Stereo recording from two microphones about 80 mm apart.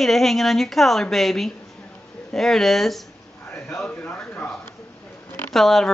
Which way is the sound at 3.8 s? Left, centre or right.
Left.